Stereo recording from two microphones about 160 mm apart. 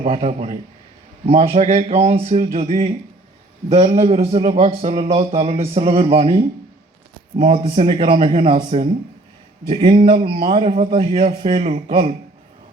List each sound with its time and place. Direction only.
0.0 s a man's voice: 45° right (ahead or behind)